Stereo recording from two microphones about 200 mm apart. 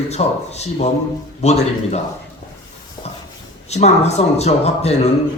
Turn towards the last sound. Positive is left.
turn(degrees=30)  # may be behind; listen again after turning